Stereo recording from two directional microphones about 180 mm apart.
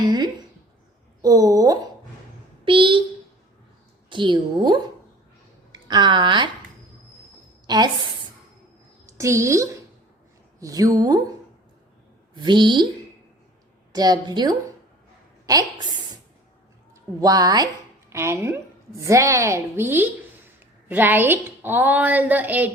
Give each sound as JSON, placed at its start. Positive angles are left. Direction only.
{"t": 1.2, "sound": "a woman's voice", "side_deg": -20}
{"t": 4.1, "sound": "a woman's voice", "side_deg": -25}
{"t": 7.7, "sound": "a woman's voice", "side_deg": -20}
{"t": 9.0, "sound": "a woman's voice", "side_deg": -15}
{"t": 12.3, "sound": "a woman's voice", "side_deg": -25}
{"t": 13.9, "sound": "a woman's voice", "side_deg": -20}